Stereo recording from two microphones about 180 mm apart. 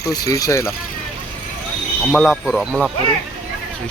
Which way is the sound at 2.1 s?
5° left (ahead or behind).